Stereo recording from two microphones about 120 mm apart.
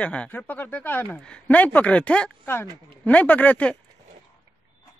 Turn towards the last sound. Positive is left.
turn(degrees=10)  # may be behind; listen again after turning